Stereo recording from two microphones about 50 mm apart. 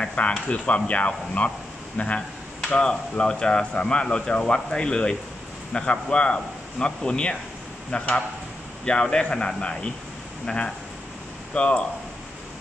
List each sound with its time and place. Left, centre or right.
0.0 s a man's voice: left